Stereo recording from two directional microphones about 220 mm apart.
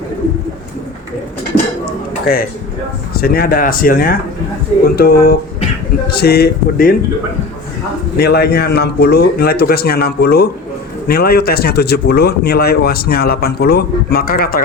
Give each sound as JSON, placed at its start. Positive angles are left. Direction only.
{"t": 1.8, "sound": "music", "side_deg": 40}
{"t": 3.2, "sound": "speech", "side_deg": 45}
{"t": 8.2, "sound": "speech", "side_deg": 45}